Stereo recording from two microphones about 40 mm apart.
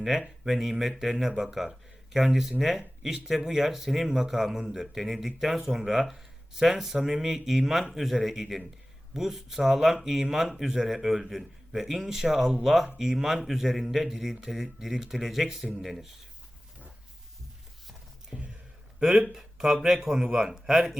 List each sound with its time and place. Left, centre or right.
0.0 s speech: centre
18.3 s a sound: centre
18.9 s speech: centre
20.2 s speech: right
20.5 s speech: centre